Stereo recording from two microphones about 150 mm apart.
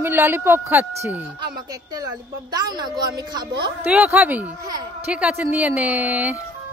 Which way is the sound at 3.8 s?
10° right (ahead or behind).